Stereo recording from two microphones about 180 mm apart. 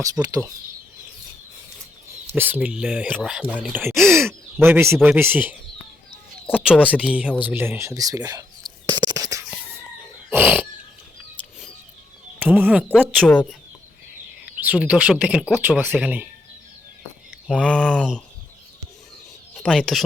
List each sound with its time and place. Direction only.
0.0 s speech: 20° right (ahead or behind)
2.2 s speech: 10° right (ahead or behind)
3.9 s speech: centre (ahead or behind)
4.3 s speech: 10° right (ahead or behind)
6.9 s speech: 5° right (ahead or behind)
7.5 s bird: 15° right (ahead or behind)
10.3 s a sound: 10° right (ahead or behind)
12.4 s speech: 10° right (ahead or behind)
13.2 s speech: 5° left (ahead or behind)
14.6 s speech: 10° right (ahead or behind)
17.5 s speech: 5° left (ahead or behind)
19.5 s speech: centre (ahead or behind)